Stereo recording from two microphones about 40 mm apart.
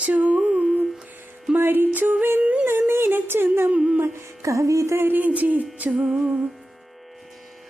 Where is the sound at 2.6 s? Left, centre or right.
Right.